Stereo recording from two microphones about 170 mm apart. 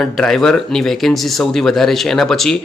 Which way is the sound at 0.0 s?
5° left (ahead or behind).